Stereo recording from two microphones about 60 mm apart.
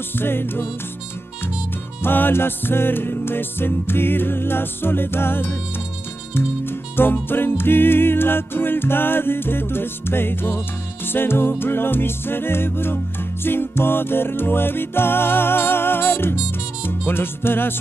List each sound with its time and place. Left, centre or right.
0.2 s music: left
2.0 s music: left